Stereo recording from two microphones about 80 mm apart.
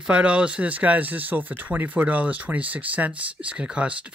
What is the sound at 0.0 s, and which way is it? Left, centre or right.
Speech, centre.